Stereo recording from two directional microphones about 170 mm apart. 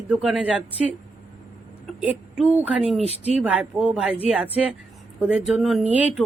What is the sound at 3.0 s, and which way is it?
Speech, 35° left (ahead or behind).